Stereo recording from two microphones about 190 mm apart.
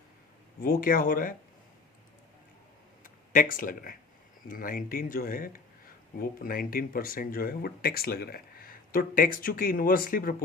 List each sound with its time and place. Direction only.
0.6 s speech: 45° left (ahead or behind)
3.0 s a sound: 45° left (ahead or behind)
4.4 s speech: 45° left (ahead or behind)